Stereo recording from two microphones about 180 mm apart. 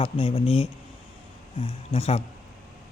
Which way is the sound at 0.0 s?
30° left (ahead or behind).